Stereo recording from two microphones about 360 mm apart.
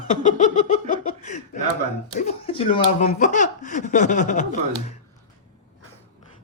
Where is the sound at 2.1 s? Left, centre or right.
Centre.